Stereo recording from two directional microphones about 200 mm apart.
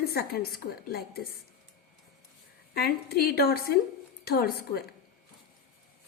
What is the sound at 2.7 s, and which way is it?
A woman's voice, 50° left (ahead or behind).